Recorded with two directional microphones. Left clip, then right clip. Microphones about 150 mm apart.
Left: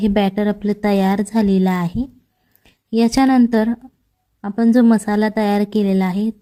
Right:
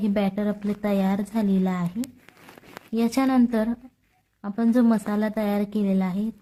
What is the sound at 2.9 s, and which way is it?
A woman's voice, 30° left (ahead or behind).